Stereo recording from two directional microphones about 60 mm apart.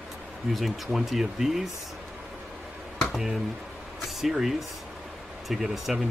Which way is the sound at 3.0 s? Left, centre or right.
Centre.